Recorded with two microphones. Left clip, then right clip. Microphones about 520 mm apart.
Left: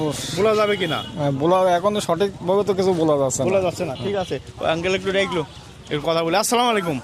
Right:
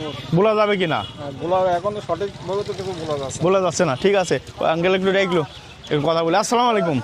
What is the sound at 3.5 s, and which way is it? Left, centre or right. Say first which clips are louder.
Speech: right 3 dB; right.